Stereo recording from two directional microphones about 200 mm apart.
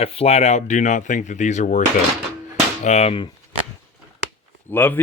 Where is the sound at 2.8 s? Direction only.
30° left (ahead or behind).